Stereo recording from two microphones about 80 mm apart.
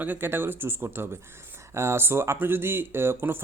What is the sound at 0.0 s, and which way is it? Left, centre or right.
Speech, right.